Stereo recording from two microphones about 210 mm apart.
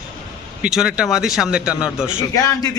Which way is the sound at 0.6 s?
5° right (ahead or behind).